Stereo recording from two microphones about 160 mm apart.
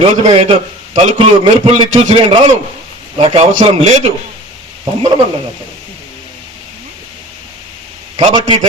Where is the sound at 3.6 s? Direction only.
40° right (ahead or behind).